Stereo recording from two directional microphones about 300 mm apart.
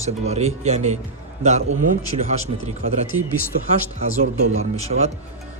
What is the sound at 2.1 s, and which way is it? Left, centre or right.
Speech, right.